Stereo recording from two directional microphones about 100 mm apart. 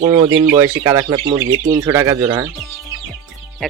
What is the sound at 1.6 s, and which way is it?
Speech, 35° right (ahead or behind).